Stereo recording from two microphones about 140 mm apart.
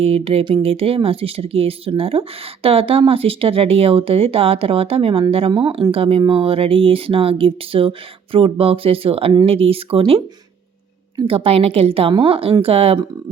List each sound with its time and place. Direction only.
0.0 s speech: 45° right (ahead or behind)
11.3 s speech: 45° right (ahead or behind)